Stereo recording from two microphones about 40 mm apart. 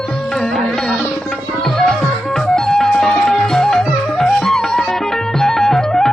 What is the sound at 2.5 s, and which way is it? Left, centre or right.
Music, centre.